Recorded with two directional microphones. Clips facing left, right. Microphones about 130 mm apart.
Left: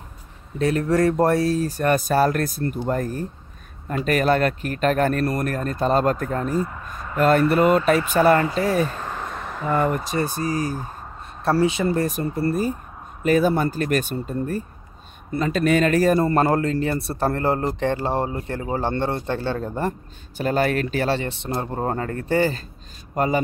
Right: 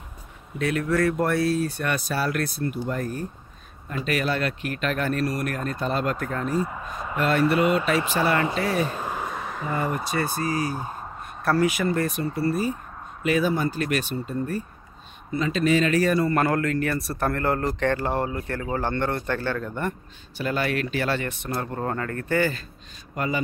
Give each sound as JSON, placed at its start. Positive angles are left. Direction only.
{"t": 0.6, "sound": "speech", "side_deg": 35}
{"t": 6.6, "sound": "speech", "side_deg": -5}
{"t": 7.2, "sound": "speech", "side_deg": 45}
{"t": 8.8, "sound": "a sound", "side_deg": -15}
{"t": 9.7, "sound": "speech", "side_deg": 60}
{"t": 10.3, "sound": "speech", "side_deg": -30}
{"t": 11.4, "sound": "speech", "side_deg": 25}
{"t": 12.4, "sound": "speech", "side_deg": 45}